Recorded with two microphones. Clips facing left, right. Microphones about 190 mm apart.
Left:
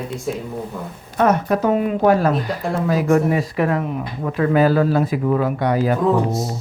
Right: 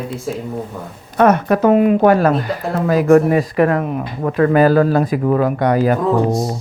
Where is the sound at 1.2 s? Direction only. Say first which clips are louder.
Right 4 dB; 65° right (ahead or behind).